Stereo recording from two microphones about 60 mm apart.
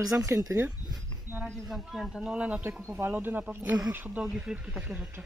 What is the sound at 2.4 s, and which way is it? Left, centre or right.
Speech, right.